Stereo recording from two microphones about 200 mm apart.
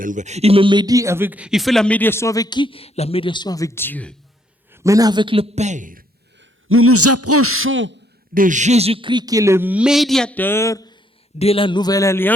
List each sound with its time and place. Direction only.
0.0 s speech: 40° right (ahead or behind); by 4.1 s 10° left (ahead or behind)
4.7 s a man's voice: 15° right (ahead or behind); by 6.0 s 40° right (ahead or behind)
6.7 s a man's voice: 90° right
7.4 s throat clearing: 90° right; by 7.9 s 75° right (ahead or behind)
8.3 s speech: 40° right (ahead or behind); by 10.9 s 15° left (ahead or behind)
11.3 s a man's voice: 30° left (ahead or behind); by 12.3 s 15° left (ahead or behind)